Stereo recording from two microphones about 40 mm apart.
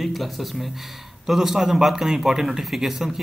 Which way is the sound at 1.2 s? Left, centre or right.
Centre.